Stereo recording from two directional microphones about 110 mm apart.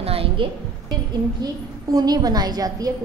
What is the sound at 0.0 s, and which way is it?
Music, 60° right (ahead or behind).